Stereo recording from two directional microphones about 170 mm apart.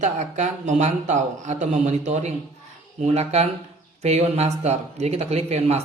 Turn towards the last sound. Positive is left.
turn(degrees=-40)  # may be behind; listen again after turning